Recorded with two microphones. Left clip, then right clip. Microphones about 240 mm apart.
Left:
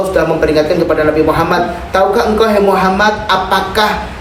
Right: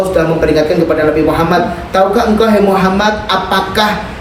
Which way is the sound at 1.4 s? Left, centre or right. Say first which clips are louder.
Right 1 dB; centre.